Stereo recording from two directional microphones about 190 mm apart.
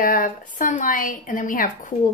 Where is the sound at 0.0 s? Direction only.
45° left (ahead or behind).